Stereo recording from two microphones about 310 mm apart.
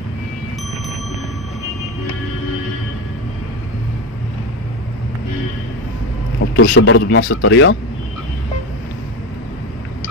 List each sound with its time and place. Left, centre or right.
6.4 s a man's voice: left